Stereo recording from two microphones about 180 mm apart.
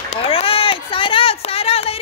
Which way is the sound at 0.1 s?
30° left (ahead or behind).